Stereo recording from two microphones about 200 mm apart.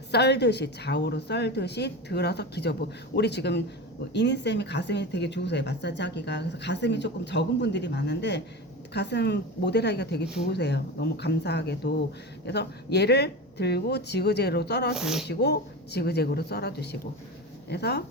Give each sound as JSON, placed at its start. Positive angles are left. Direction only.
{"t": 0.1, "sound": "speech", "side_deg": 55}
{"t": 14.9, "sound": "speech", "side_deg": 0}
{"t": 15.3, "sound": "speech", "side_deg": 55}